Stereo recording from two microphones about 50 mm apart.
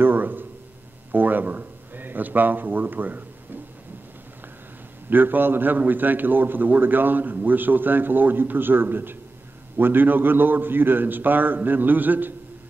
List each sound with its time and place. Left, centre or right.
0.0 s a sound: right
1.1 s a man's voice: right
5.1 s a man's voice: right